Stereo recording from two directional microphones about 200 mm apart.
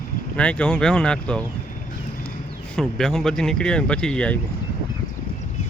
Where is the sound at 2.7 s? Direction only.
Centre (ahead or behind).